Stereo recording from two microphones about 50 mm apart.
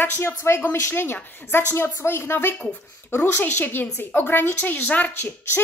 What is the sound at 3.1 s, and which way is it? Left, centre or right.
Speech, left.